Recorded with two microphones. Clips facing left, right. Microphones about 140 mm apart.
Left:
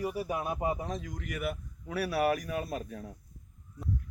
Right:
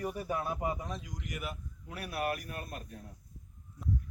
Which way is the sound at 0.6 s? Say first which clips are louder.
Left 4 dB; 35° left (ahead or behind).